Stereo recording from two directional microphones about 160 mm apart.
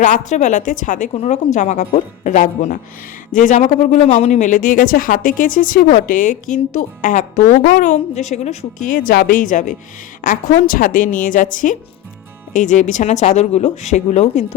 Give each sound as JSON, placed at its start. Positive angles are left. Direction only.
{"t": 0.0, "sound": "a woman's voice", "side_deg": 50}